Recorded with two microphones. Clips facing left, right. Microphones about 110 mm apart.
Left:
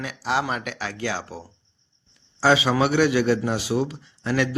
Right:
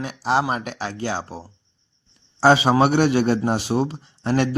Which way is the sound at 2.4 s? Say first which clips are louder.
Right 4 dB; 40° right (ahead or behind).